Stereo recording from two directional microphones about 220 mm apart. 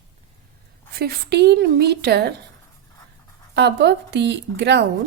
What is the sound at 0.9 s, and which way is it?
Speech, 50° right (ahead or behind).